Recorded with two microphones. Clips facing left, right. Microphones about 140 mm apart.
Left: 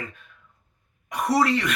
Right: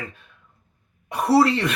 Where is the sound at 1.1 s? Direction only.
30° right (ahead or behind).